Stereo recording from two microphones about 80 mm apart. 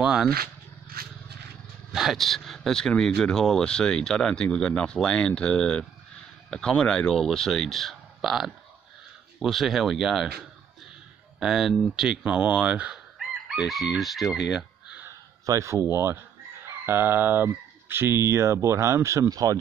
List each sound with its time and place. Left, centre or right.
0.0 s speech: centre
1.9 s speech: centre
11.3 s speech: centre
12.9 s chicken: centre
15.0 s a sound: right
16.6 s speech: right
19.2 s speech: right